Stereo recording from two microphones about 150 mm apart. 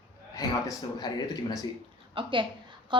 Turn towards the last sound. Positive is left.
turn(degrees=-30)  # may be behind; listen again after turning